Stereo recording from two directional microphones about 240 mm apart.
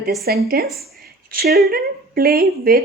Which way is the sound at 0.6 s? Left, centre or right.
Centre.